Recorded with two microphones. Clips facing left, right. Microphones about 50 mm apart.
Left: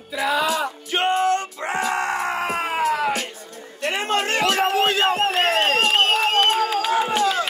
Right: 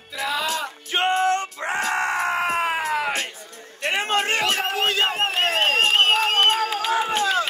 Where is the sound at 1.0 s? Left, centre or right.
Right.